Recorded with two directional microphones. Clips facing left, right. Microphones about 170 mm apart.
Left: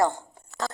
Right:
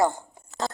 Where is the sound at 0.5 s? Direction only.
20° right (ahead or behind).